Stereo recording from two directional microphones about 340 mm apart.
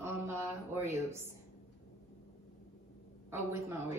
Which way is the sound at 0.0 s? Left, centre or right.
Centre.